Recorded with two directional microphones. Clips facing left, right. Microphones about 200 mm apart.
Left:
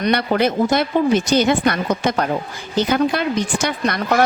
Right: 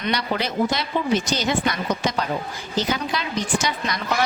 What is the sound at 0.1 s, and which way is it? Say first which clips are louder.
A woman's voice: left 7 dB; 55° left (ahead or behind).